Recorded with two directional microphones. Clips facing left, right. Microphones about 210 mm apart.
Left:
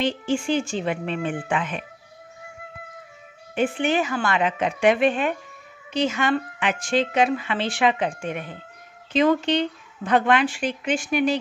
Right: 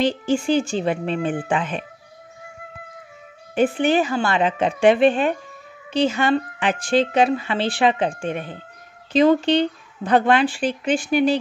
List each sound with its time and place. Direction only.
0.0 s speech: 35° right (ahead or behind)
3.5 s speech: 40° right (ahead or behind)